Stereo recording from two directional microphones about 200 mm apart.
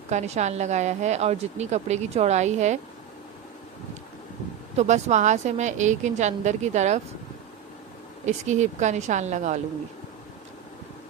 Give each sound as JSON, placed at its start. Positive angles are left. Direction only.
{"t": 0.1, "sound": "speech", "side_deg": -35}
{"t": 4.8, "sound": "speech", "side_deg": -35}
{"t": 8.2, "sound": "speech", "side_deg": -35}